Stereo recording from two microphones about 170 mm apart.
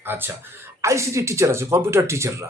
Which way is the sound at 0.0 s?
10° right (ahead or behind).